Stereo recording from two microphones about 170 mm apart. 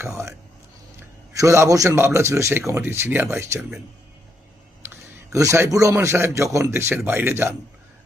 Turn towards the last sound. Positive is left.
turn(degrees=-15)  # may be behind; listen again after turning